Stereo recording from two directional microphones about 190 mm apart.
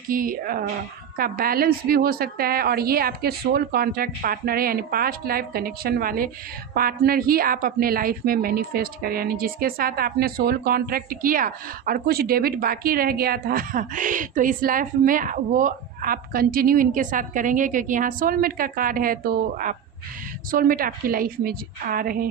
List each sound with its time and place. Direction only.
0.1 s a woman's voice: 50° right (ahead or behind)